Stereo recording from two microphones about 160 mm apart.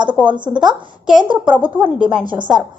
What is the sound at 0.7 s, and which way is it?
Speech, 5° right (ahead or behind).